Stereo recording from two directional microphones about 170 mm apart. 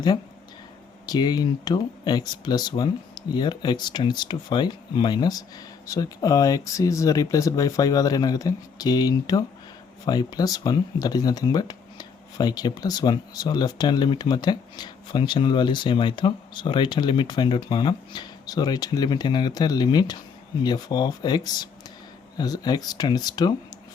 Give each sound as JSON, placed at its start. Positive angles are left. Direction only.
{"t": 1.0, "sound": "speech", "side_deg": 25}